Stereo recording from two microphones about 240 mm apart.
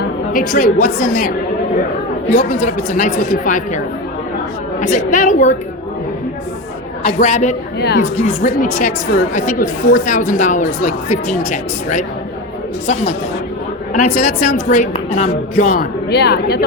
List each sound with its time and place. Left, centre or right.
0.3 s a woman's voice: left
4.8 s a woman's voice: left
7.0 s speech: left
7.8 s a woman's voice: left
8.1 s a woman's voice: left
13.9 s a woman's voice: left